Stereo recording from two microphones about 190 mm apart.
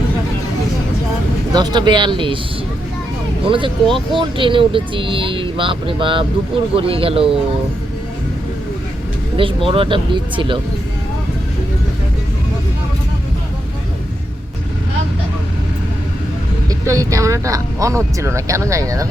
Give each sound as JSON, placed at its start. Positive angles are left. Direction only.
{"t": 1.5, "sound": "speech", "side_deg": -20}
{"t": 3.4, "sound": "speech", "side_deg": -25}
{"t": 9.6, "sound": "speech", "side_deg": -30}
{"t": 16.6, "sound": "speech", "side_deg": -15}